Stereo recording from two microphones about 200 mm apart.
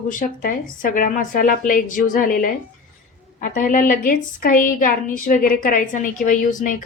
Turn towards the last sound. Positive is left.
turn(degrees=40)  # may be behind; listen again after turning